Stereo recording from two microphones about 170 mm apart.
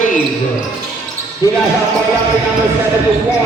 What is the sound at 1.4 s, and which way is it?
Speech, 20° left (ahead or behind).